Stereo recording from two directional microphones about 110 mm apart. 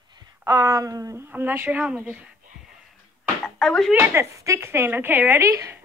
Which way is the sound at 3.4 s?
5° left (ahead or behind).